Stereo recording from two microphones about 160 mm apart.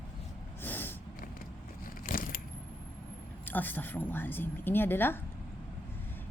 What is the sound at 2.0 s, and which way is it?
Keys jangling, 60° left (ahead or behind).